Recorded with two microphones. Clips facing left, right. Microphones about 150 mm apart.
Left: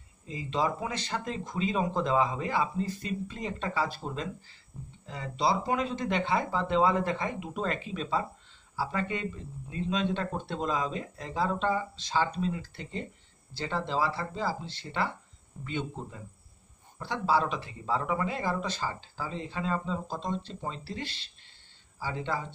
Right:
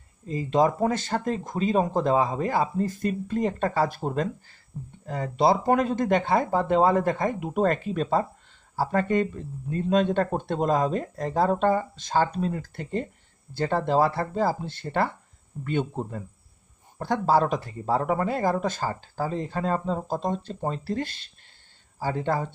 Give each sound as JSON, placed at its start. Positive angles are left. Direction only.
{"t": 0.3, "sound": "speech", "side_deg": -45}